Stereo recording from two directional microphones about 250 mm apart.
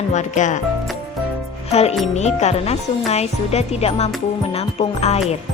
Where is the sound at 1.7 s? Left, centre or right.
Left.